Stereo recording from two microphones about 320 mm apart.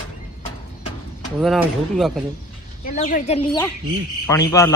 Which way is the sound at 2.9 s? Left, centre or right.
Left.